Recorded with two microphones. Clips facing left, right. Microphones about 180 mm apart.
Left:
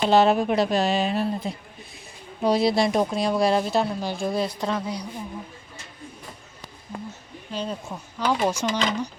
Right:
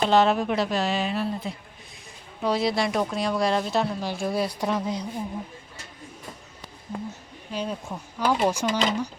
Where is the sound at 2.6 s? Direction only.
35° left (ahead or behind).